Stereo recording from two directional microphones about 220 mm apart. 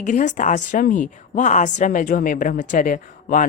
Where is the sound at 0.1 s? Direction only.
35° left (ahead or behind).